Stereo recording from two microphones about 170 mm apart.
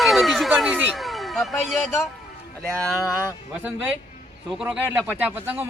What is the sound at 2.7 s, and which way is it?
Speech, 5° left (ahead or behind).